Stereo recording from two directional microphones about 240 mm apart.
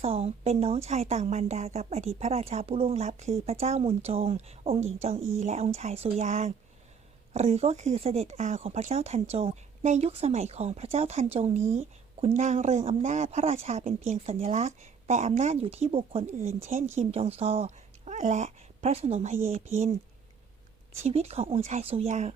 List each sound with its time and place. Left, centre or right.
0.0 s a woman's voice: right
21.0 s a woman's voice: right